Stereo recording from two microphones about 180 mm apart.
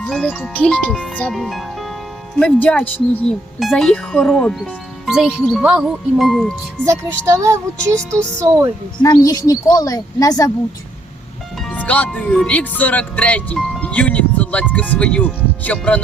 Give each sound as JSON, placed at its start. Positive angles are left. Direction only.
{"t": 0.0, "sound": "speech", "side_deg": 5}
{"t": 6.8, "sound": "speech", "side_deg": -15}
{"t": 7.8, "sound": "speech", "side_deg": 5}
{"t": 8.1, "sound": "speech", "side_deg": -15}
{"t": 9.0, "sound": "a woman's voice", "side_deg": 20}
{"t": 11.5, "sound": "speech", "side_deg": 5}